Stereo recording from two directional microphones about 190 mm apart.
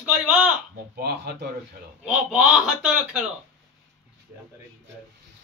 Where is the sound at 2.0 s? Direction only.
5° right (ahead or behind).